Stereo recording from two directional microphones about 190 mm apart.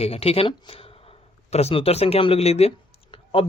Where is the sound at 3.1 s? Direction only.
25° left (ahead or behind).